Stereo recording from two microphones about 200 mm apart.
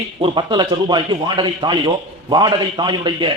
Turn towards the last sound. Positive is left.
turn(degrees=-20)  # may be behind; listen again after turning